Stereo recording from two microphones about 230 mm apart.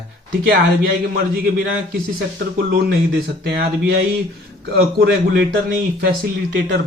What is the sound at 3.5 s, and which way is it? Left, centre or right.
Speech, right.